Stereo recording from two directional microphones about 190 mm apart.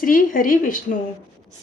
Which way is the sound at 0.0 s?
45° left (ahead or behind).